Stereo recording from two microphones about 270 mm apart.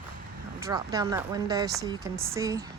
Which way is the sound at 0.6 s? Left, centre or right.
Centre.